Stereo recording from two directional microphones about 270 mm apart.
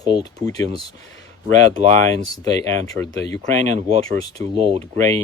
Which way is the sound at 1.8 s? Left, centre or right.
Right.